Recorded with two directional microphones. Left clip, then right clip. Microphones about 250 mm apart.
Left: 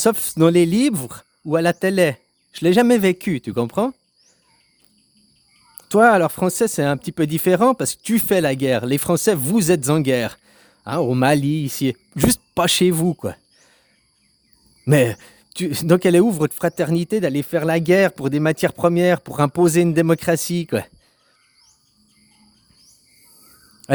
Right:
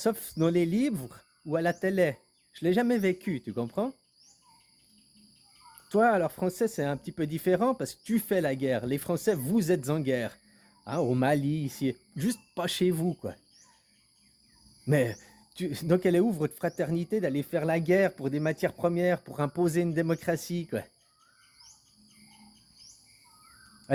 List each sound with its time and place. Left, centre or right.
0.0 s speech: left
5.7 s speech: left
14.8 s speech: left
23.8 s a sound: left